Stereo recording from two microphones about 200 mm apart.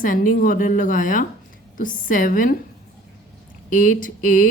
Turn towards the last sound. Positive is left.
turn(degrees=40)  # may be behind; listen again after turning